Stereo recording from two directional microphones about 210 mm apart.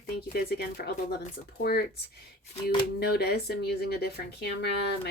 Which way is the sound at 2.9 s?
50° left (ahead or behind).